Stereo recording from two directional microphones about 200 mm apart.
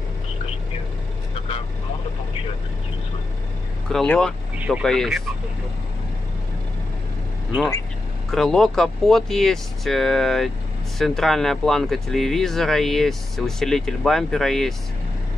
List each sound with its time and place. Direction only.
3.9 s speech: 5° left (ahead or behind)
8.3 s speech: centre (ahead or behind)